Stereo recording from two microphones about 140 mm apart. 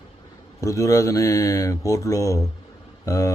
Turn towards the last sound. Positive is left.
turn(degrees=20)  # may be behind; listen again after turning